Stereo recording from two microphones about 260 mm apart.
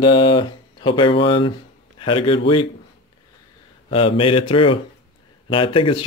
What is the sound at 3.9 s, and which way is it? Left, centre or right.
Speech, left.